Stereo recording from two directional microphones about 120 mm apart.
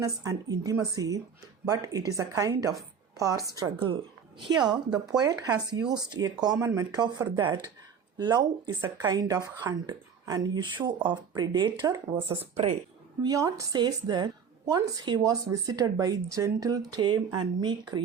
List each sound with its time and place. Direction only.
0.0 s a woman's voice: 30° right (ahead or behind)
3.8 s speech: 45° right (ahead or behind)